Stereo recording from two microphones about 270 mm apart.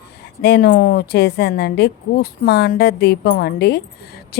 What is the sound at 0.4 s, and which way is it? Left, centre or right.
A woman's voice, left.